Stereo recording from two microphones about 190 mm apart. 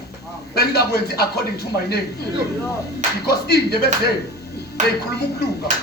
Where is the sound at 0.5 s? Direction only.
55° left (ahead or behind).